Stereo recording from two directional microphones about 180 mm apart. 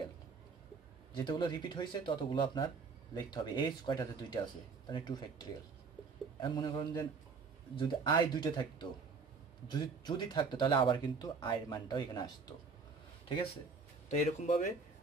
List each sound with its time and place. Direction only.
1.1 s speech: 25° left (ahead or behind)
14.1 s speech: 40° left (ahead or behind)